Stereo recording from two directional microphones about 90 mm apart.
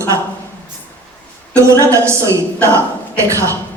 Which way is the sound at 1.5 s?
35° right (ahead or behind).